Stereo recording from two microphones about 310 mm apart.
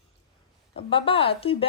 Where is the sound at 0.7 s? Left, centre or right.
Centre.